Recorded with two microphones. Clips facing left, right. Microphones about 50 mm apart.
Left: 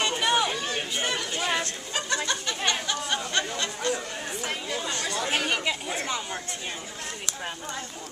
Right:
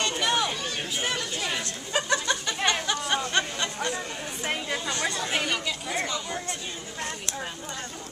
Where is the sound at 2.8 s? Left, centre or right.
Centre.